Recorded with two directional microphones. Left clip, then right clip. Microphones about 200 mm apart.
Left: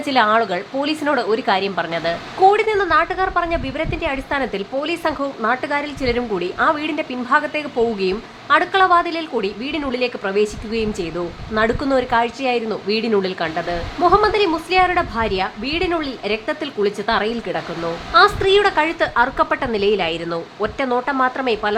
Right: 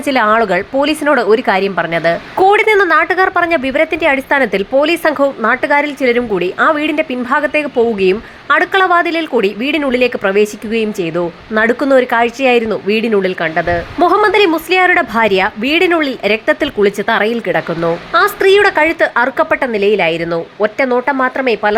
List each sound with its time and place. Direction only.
0.0 s a woman's voice: 20° right (ahead or behind)
14.1 s a woman's voice: 30° right (ahead or behind)